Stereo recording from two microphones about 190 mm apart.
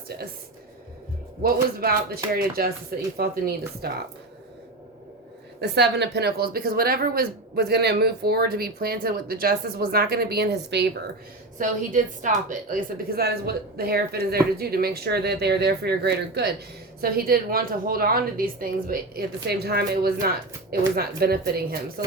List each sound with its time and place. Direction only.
1.8 s a woman's voice: 55° right (ahead or behind)
5.5 s a woman's voice: 60° right (ahead or behind)
11.5 s a woman's voice: 40° right (ahead or behind)